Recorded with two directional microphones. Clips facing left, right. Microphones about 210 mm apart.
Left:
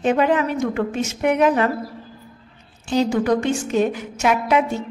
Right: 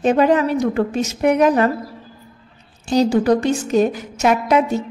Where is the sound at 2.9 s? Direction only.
35° right (ahead or behind).